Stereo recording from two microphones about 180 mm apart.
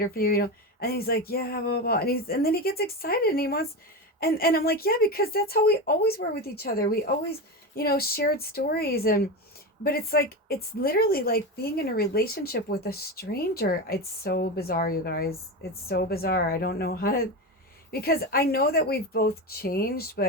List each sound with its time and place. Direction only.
0.0 s speech: 55° left (ahead or behind)